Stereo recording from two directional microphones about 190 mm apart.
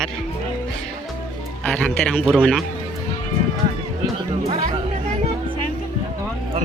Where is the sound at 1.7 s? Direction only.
5° left (ahead or behind).